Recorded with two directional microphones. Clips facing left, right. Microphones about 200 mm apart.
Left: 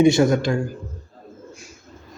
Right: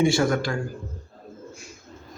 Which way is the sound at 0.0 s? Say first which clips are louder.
Left 5 dB; 20° left (ahead or behind).